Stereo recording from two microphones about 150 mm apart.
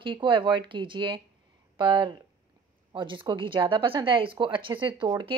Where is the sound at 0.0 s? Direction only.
35° right (ahead or behind).